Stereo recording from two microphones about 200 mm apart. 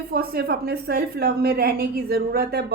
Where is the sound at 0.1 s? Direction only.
50° right (ahead or behind).